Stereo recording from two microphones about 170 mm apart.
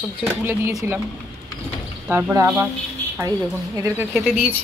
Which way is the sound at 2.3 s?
15° right (ahead or behind).